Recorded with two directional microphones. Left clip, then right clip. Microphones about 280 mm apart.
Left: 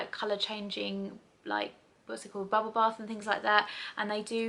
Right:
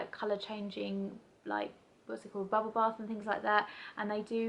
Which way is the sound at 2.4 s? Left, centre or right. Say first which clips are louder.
Left 1 dB; right.